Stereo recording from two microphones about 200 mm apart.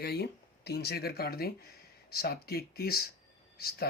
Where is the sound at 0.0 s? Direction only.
55° left (ahead or behind).